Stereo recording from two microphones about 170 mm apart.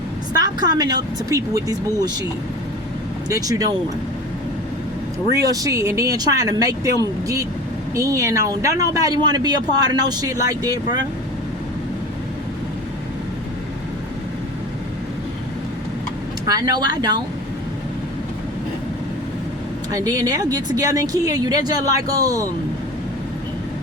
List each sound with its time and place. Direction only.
0.3 s speech: 20° right (ahead or behind)
3.2 s speech: 20° right (ahead or behind)
5.3 s speech: 20° right (ahead or behind)
7.9 s speech: 20° right (ahead or behind)
16.5 s speech: 25° right (ahead or behind)
19.9 s speech: 20° right (ahead or behind)